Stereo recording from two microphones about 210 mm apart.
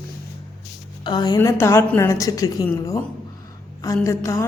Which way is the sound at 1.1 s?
20° left (ahead or behind).